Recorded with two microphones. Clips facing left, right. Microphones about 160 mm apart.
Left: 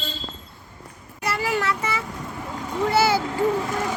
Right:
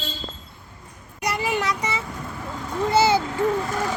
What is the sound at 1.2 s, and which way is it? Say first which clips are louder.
Child singing: even; 20° right (ahead or behind).